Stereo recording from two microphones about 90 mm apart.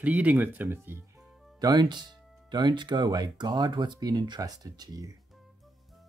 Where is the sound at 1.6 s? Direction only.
50° right (ahead or behind).